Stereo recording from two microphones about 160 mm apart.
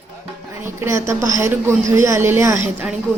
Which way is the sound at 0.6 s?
15° right (ahead or behind).